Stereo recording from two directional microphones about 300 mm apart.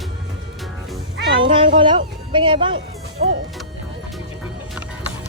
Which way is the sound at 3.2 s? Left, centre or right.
Right.